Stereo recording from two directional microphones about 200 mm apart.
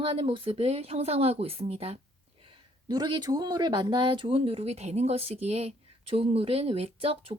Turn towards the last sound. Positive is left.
turn(degrees=-30)  # may be behind; listen again after turning